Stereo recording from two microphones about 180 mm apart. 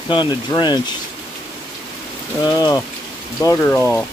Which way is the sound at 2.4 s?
20° left (ahead or behind).